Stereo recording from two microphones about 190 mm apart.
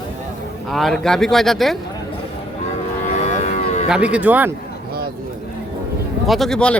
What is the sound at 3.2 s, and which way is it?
Livestock, 35° left (ahead or behind).